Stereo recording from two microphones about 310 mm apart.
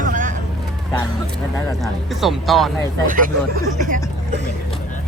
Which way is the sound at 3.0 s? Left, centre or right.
Right.